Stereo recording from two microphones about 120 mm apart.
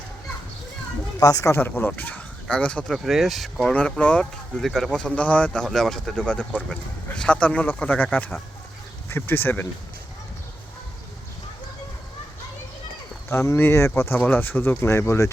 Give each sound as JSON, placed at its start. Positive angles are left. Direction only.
{"t": 1.2, "sound": "speech", "side_deg": 25}
{"t": 13.3, "sound": "speech", "side_deg": 25}